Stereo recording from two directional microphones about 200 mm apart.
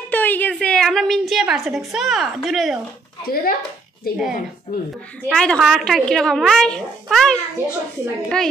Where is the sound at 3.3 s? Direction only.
50° left (ahead or behind).